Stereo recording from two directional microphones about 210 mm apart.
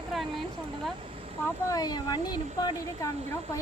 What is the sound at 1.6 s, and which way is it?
Speech, 15° left (ahead or behind).